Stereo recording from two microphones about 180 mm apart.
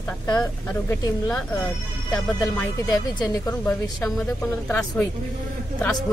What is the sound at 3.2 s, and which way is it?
Speech, 20° left (ahead or behind).